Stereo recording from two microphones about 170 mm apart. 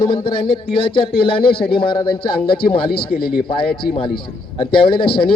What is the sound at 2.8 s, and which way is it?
Speech, 65° left (ahead or behind).